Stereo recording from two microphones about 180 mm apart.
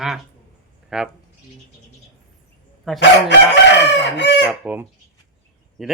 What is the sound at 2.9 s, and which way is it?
Speech, centre (ahead or behind).